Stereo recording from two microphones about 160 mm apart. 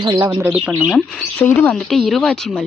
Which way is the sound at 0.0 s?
25° right (ahead or behind).